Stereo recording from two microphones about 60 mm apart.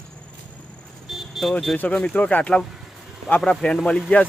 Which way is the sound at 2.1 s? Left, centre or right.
Left.